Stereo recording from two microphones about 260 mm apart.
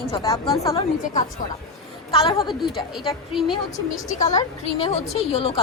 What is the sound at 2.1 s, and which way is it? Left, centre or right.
Speech, centre.